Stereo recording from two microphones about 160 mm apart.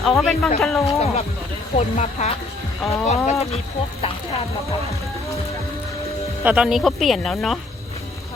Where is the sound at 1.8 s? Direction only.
45° left (ahead or behind).